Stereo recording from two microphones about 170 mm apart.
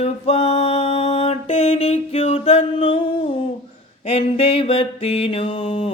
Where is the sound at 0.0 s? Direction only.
35° left (ahead or behind).